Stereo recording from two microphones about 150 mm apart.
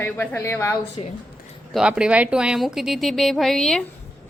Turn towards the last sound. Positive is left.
turn(degrees=5)  # may be behind; listen again after turning